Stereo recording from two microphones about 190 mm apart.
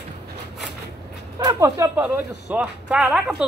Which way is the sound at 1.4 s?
15° right (ahead or behind).